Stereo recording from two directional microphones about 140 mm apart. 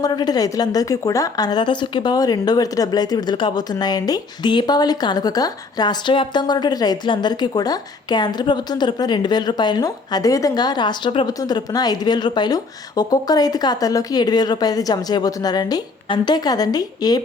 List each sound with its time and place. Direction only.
0.0 s a woman's voice: 30° left (ahead or behind)